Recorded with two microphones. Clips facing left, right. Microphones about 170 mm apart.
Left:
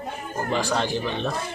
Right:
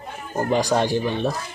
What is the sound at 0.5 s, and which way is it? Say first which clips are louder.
Speech: right 5 dB; 15° right (ahead or behind).